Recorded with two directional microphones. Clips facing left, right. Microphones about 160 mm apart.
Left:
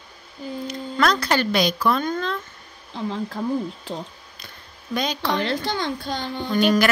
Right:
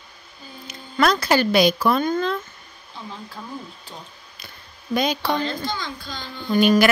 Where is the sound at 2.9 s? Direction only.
90° left.